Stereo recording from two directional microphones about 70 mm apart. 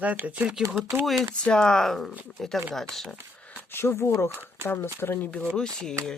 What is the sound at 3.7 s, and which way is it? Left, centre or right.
Speech, left.